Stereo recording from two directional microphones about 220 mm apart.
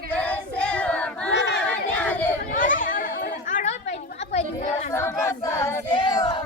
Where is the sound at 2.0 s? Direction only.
5° left (ahead or behind).